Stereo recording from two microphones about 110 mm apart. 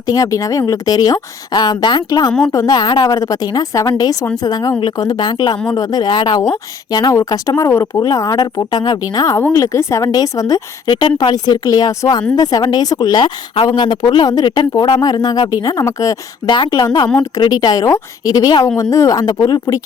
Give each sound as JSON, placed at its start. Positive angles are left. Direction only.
{"t": 0.1, "sound": "a woman's voice", "side_deg": 30}
{"t": 16.5, "sound": "a woman's voice", "side_deg": 45}
{"t": 16.8, "sound": "a woman's voice", "side_deg": 35}